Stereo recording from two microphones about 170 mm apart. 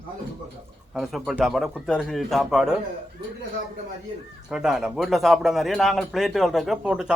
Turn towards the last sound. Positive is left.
turn(degrees=-5)  # may be behind; listen again after turning